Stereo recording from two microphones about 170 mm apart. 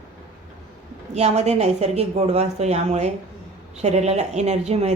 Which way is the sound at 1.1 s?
40° right (ahead or behind).